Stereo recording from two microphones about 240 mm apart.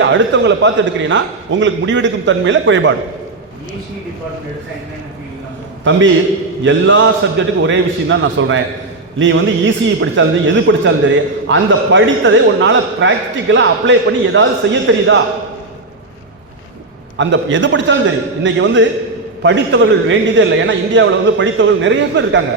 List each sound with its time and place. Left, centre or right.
0.0 s a man's voice: right
5.9 s a man's voice: right
17.2 s a man's voice: right